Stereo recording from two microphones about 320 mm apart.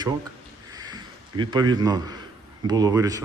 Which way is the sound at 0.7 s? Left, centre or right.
Centre.